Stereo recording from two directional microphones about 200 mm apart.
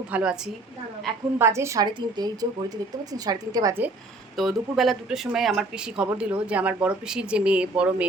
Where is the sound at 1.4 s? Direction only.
15° right (ahead or behind).